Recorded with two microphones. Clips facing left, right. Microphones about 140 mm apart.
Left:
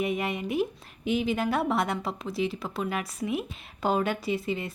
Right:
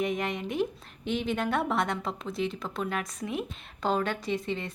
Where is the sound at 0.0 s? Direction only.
5° left (ahead or behind).